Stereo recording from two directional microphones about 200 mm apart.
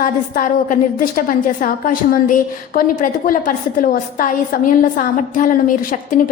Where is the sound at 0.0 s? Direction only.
45° left (ahead or behind).